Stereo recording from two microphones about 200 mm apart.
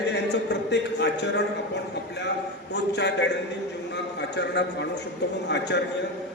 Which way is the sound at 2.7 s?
60° left (ahead or behind).